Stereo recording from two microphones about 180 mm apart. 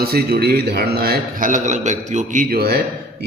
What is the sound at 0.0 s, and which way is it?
A man's voice, 60° right (ahead or behind).